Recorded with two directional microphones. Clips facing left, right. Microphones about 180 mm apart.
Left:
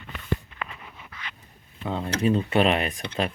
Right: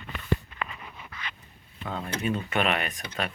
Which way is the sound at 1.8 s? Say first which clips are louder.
Left 6 dB; 25° left (ahead or behind).